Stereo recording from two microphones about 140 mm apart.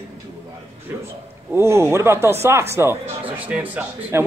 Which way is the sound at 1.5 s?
20° right (ahead or behind).